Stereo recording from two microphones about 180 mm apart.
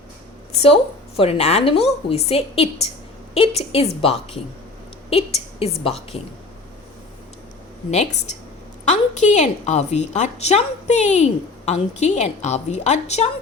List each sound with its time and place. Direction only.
0.5 s a woman's voice: 35° left (ahead or behind)
7.9 s a woman's voice: 40° left (ahead or behind)